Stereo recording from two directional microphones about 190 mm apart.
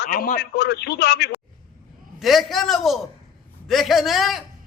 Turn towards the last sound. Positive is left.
turn(degrees=0)  # may be behind; listen again after turning